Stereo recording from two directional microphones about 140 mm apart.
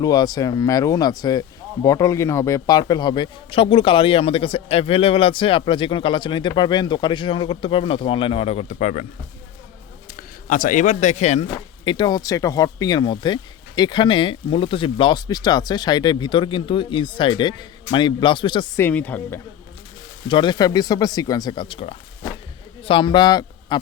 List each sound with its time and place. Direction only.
0.0 s speech: 30° left (ahead or behind); by 9.0 s 60° left (ahead or behind)
10.2 s speech: 70° left (ahead or behind); by 11.4 s 55° left (ahead or behind)
11.9 s speech: 30° left (ahead or behind)
18.8 s speech: 10° left (ahead or behind)
20.2 s speech: 35° left (ahead or behind)